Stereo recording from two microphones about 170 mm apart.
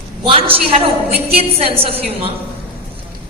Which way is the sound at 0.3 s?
35° right (ahead or behind).